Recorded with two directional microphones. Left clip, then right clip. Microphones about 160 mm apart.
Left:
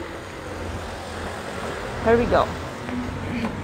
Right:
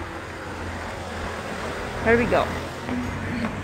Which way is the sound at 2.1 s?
10° right (ahead or behind).